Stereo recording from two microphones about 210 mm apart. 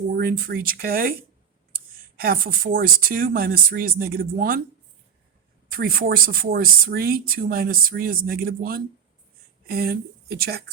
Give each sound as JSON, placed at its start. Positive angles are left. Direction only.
{"t": 0.1, "sound": "speech", "side_deg": -45}
{"t": 2.1, "sound": "speech", "side_deg": -45}
{"t": 5.6, "sound": "speech", "side_deg": -45}